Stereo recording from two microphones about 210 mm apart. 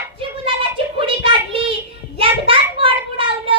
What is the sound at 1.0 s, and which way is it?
Child singing, 25° right (ahead or behind).